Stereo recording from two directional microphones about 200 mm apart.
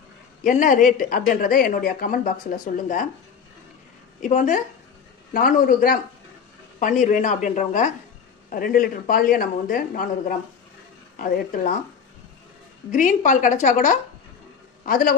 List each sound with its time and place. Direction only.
0.4 s speech: 40° left (ahead or behind)
4.2 s a woman's voice: 40° left (ahead or behind)
12.9 s a man's voice: 40° left (ahead or behind)